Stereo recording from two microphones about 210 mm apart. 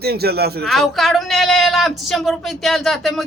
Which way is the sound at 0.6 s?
Centre (ahead or behind).